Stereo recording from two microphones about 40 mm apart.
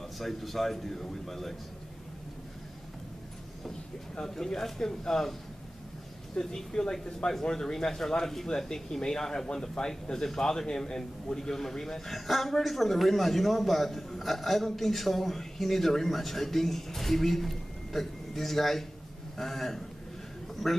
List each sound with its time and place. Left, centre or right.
0.2 s speech: centre
4.2 s speech: centre
6.3 s speech: centre